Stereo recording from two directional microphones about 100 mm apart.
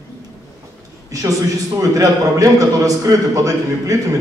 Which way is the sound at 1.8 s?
35° right (ahead or behind).